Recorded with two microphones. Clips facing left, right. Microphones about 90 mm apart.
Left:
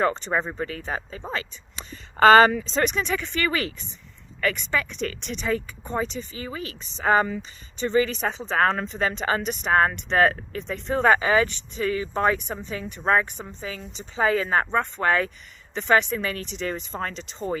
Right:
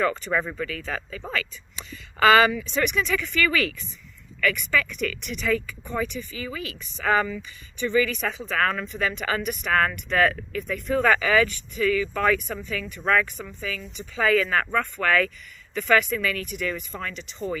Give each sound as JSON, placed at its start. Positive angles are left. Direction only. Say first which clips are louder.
{"t": 0.0, "sound": "speech", "louder": "left 1 dB", "side_deg": 25}
{"t": 2.1, "sound": "speech", "louder": "left 3 dB", "side_deg": 40}